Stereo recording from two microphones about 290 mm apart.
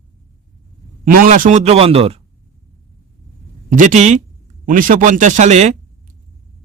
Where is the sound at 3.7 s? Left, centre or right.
Right.